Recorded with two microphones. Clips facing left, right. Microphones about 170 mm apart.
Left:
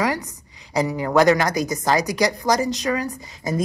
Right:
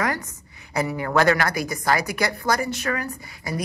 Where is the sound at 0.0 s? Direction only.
15° left (ahead or behind).